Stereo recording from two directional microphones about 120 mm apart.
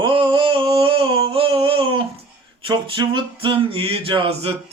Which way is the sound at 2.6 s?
45° right (ahead or behind).